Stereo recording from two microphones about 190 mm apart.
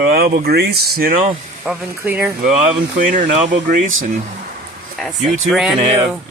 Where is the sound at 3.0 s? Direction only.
45° right (ahead or behind).